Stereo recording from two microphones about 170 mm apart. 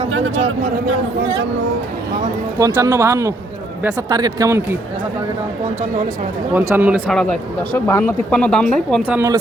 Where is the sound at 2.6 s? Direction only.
15° right (ahead or behind).